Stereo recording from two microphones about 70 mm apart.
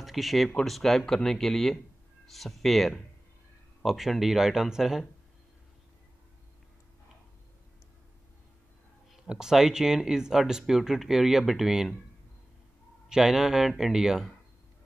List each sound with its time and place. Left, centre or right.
0.0 s speech: centre
9.3 s speech: centre
13.1 s speech: centre